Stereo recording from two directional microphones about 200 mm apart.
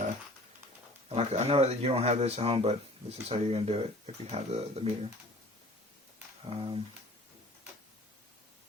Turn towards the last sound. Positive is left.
turn(degrees=-30)  # may be behind; listen again after turning